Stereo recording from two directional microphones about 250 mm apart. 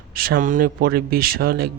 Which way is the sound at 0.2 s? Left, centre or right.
Right.